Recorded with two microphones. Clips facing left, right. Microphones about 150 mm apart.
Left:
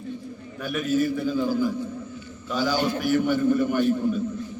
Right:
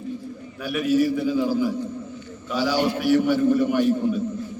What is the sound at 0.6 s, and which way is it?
A man's voice, 5° right (ahead or behind).